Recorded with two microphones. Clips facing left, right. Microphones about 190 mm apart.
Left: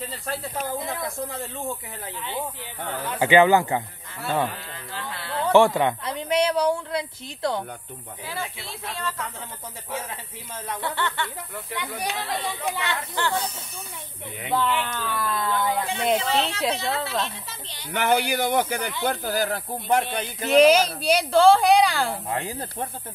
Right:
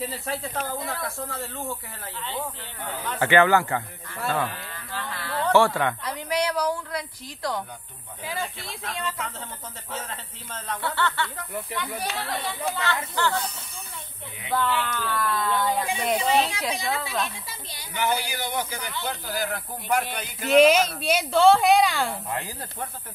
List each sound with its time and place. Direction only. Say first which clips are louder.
0.0 s a woman's voice: right 1 dB; 5° right (ahead or behind)
0.7 s speech: left 2 dB; 15° left (ahead or behind)
4.9 s a sound: even; 25° left (ahead or behind)
5.4 s a woman's voice: left 3 dB; 15° left (ahead or behind)
9.8 s speech: left 3 dB; 10° left (ahead or behind)
14.5 s speech: left 1 dB; 15° left (ahead or behind)
16.2 s speech: right 1 dB; 10° right (ahead or behind)
17.9 s speech: left 5 dB; 65° left (ahead or behind)
19.0 s speech: left 5 dB; 45° left (ahead or behind)
19.9 s a woman's voice: left 3 dB; 25° left (ahead or behind)
20.4 s a woman's voice: left 1 dB; centre (ahead or behind)
22.3 s a woman's voice: left 3 dB; 25° left (ahead or behind)